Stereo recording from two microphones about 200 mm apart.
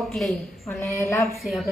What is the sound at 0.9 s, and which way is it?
Speech, 15° left (ahead or behind).